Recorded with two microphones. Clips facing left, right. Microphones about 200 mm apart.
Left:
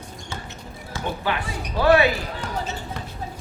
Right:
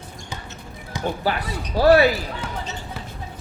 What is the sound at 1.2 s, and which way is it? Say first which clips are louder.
Speech: right 2 dB; 40° right (ahead or behind).